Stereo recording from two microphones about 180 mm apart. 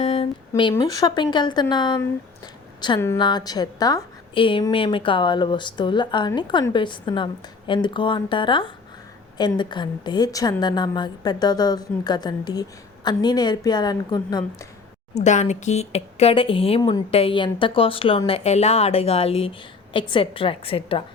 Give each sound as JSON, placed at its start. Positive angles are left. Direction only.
{"t": 0.0, "sound": "a sound", "side_deg": 35}
{"t": 0.7, "sound": "a woman's voice", "side_deg": 20}
{"t": 15.1, "sound": "speech", "side_deg": 40}